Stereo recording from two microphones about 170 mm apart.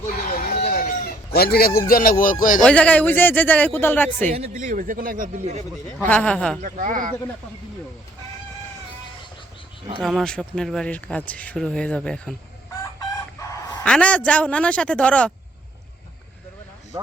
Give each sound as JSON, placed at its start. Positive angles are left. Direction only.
{"t": 0.3, "sound": "chicken", "side_deg": 55}
{"t": 1.9, "sound": "speech", "side_deg": 55}
{"t": 2.6, "sound": "a man's voice", "side_deg": 5}
{"t": 4.3, "sound": "speech", "side_deg": -40}
{"t": 6.0, "sound": "a man's voice", "side_deg": 10}
{"t": 6.6, "sound": "speech", "side_deg": -50}
{"t": 10.0, "sound": "speech", "side_deg": 0}
{"t": 13.8, "sound": "a man's voice", "side_deg": 5}